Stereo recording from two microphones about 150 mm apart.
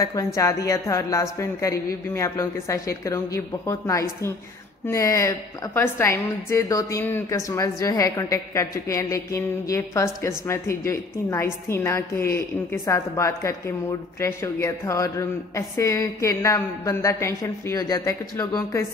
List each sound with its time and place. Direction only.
0.0 s a woman's voice: 20° left (ahead or behind)